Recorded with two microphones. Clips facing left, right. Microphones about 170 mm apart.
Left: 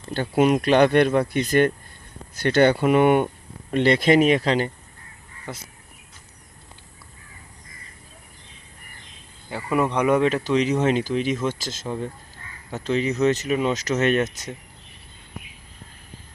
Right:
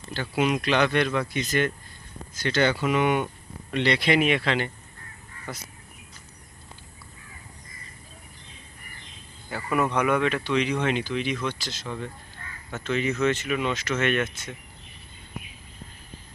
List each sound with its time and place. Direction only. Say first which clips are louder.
0.1 s speech: left 6 dB; 50° left (ahead or behind)
5.5 s speech: left 2 dB; 25° left (ahead or behind)
9.6 s speech: left 3 dB; 25° left (ahead or behind)